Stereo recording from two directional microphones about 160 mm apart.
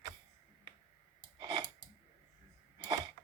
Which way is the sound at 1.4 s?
25° right (ahead or behind).